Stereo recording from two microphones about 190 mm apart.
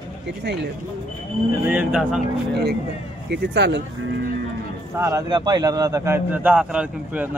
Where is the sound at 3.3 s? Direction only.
65° right (ahead or behind).